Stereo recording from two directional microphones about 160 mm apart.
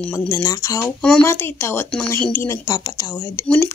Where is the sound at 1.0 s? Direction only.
5° left (ahead or behind).